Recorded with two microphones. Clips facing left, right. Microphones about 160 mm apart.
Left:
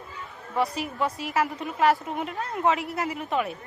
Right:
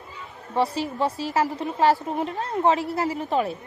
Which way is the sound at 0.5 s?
30° right (ahead or behind).